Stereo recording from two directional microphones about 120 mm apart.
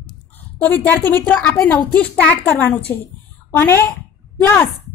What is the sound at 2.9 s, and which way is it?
A woman's voice, 25° left (ahead or behind).